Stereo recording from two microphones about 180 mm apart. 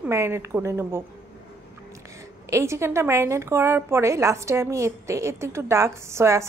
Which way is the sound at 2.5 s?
15° right (ahead or behind).